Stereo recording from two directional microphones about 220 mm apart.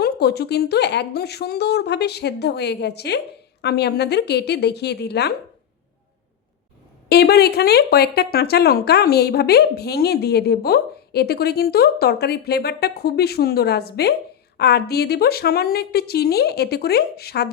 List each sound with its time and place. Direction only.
0.0 s speech: 45° left (ahead or behind)
7.1 s speech: 45° left (ahead or behind)